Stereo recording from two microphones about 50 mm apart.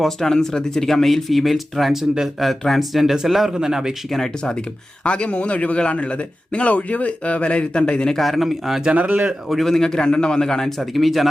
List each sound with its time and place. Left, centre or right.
0.0 s speech: centre
4.1 s a man's voice: centre
5.0 s a man's voice: left
8.1 s speech: centre
8.8 s speech: right
9.5 s a man's voice: centre